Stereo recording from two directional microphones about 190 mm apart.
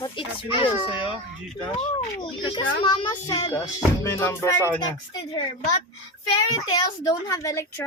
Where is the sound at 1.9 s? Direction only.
25° left (ahead or behind).